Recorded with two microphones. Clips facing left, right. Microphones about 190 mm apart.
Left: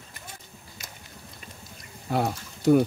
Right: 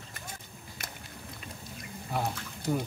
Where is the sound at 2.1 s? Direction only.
75° left (ahead or behind).